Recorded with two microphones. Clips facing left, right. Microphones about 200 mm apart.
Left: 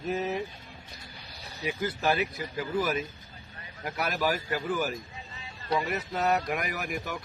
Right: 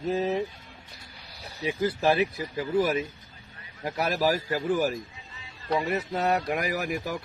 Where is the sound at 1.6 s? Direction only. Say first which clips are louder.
Right 4 dB; 30° right (ahead or behind).